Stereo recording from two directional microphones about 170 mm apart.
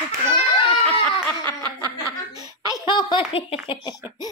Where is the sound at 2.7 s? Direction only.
25° left (ahead or behind).